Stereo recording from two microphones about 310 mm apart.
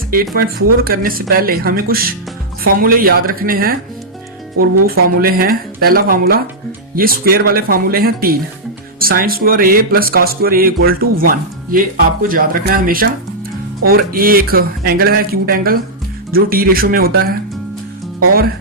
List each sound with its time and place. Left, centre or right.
0.1 s speech: right
5.2 s speech: right